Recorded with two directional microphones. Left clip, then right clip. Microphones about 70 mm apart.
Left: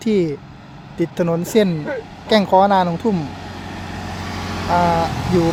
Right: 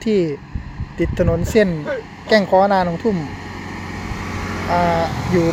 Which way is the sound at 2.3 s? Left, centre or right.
Left.